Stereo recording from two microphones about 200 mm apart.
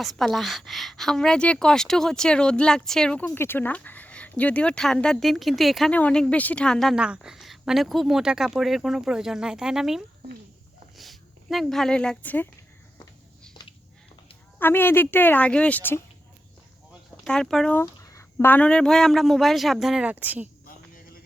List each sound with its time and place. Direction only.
0.0 s a woman's voice: centre (ahead or behind)
13.5 s a sound: 20° left (ahead or behind)
14.6 s speech: 10° left (ahead or behind)
17.2 s a woman's voice: 5° left (ahead or behind)